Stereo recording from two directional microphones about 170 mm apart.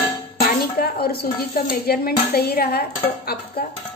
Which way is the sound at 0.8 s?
65° left (ahead or behind).